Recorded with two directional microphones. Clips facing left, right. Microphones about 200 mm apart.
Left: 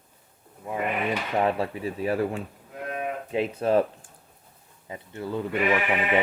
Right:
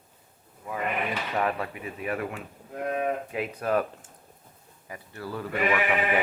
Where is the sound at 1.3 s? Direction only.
30° left (ahead or behind).